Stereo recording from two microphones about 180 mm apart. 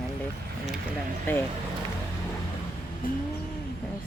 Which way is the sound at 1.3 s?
10° left (ahead or behind).